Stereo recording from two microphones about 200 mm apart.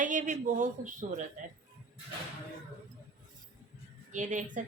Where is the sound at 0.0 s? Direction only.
40° right (ahead or behind).